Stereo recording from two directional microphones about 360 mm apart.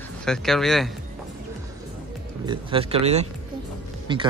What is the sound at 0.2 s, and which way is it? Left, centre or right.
Speech, centre.